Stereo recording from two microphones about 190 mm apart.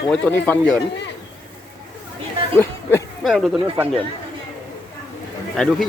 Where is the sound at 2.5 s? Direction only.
10° left (ahead or behind).